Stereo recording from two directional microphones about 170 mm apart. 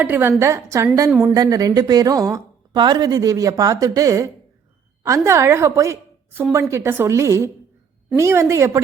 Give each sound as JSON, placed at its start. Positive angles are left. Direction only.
{"t": 0.0, "sound": "a woman's voice", "side_deg": -10}